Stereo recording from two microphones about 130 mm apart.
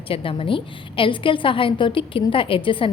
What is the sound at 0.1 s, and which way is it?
A woman's voice, 45° left (ahead or behind).